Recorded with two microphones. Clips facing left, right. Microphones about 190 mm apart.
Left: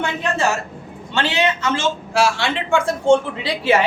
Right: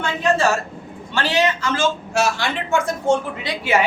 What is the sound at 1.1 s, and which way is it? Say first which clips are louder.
Speech: even; 25° left (ahead or behind).